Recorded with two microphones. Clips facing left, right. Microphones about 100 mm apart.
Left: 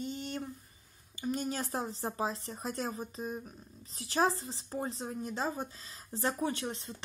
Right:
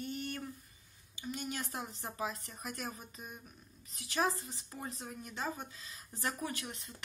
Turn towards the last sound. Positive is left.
turn(degrees=30)  # may be behind; listen again after turning